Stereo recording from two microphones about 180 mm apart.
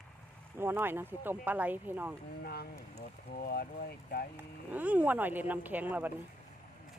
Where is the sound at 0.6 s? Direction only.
10° right (ahead or behind).